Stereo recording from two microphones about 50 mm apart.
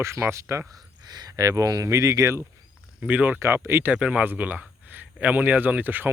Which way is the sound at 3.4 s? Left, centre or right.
Right.